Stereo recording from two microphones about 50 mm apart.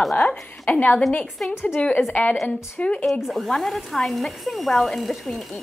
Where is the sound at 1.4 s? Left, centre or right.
Centre.